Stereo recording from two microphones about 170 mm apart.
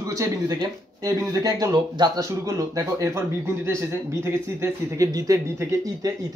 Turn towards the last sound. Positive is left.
turn(degrees=-20)  # may be behind; listen again after turning